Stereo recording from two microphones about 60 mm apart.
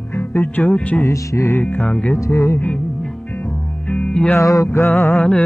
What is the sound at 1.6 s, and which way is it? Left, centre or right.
Music, left.